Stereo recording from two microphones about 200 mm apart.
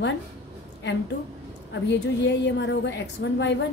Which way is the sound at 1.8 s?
60° left (ahead or behind).